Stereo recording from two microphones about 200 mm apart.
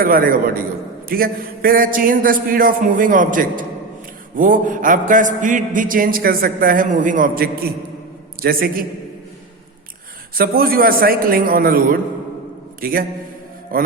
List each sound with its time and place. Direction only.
0.0 s a man's voice: 45° right (ahead or behind)
4.4 s a sound: 40° right (ahead or behind)
8.4 s a man's voice: 45° right (ahead or behind)
10.3 s a man's voice: 50° right (ahead or behind)
13.7 s music: 45° right (ahead or behind)